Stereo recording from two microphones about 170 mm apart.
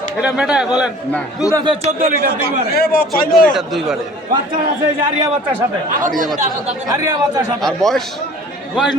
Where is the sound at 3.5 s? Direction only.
Centre (ahead or behind).